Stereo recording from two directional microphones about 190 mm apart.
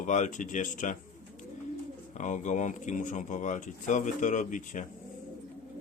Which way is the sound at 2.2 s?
40° left (ahead or behind).